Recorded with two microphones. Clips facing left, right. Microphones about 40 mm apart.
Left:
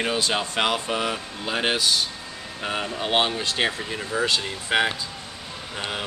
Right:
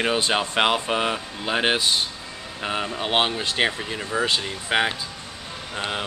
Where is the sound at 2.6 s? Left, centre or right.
Centre.